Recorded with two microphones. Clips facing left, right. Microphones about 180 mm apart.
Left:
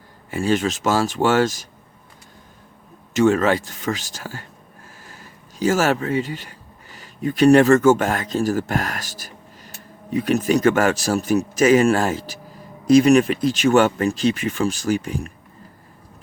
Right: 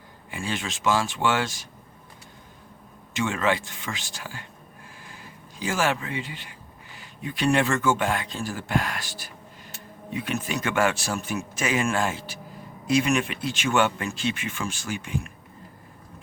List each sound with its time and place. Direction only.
0.3 s speech: 40° left (ahead or behind)
3.1 s speech: 40° left (ahead or behind)